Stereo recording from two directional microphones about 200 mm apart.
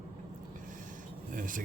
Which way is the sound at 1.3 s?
40° right (ahead or behind).